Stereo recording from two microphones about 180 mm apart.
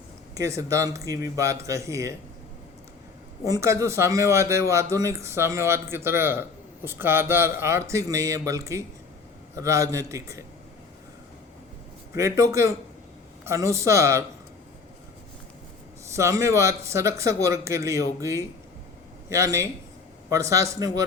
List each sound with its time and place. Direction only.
0.3 s speech: 15° right (ahead or behind)
3.4 s speech: 15° right (ahead or behind)
12.1 s speech: 15° right (ahead or behind)
16.1 s speech: 15° right (ahead or behind)